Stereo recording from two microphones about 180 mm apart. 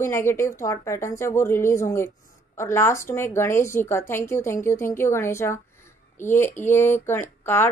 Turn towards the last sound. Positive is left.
turn(degrees=10)  # may be behind; listen again after turning